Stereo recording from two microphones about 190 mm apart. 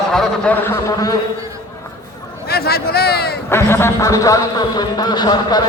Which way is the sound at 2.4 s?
55° left (ahead or behind).